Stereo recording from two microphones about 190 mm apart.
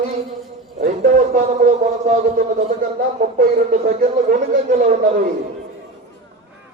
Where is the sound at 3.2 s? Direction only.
45° right (ahead or behind).